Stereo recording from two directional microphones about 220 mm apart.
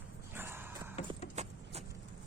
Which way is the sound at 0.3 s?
10° right (ahead or behind).